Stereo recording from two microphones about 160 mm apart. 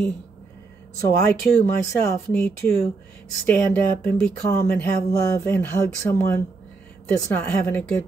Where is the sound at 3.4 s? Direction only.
10° left (ahead or behind).